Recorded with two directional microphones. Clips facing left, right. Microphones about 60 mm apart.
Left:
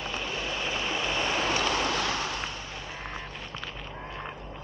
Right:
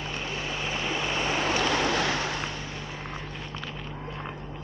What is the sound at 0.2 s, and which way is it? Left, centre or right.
Vehicle, centre.